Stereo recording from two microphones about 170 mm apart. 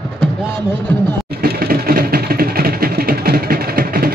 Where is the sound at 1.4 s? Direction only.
60° right (ahead or behind).